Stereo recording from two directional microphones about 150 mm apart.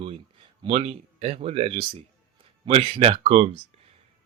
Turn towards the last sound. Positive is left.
turn(degrees=-40)  # may be behind; listen again after turning